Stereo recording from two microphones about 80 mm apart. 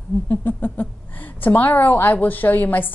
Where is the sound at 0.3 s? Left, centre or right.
Left.